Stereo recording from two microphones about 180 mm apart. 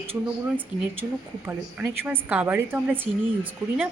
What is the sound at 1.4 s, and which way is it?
A woman's voice, 10° right (ahead or behind).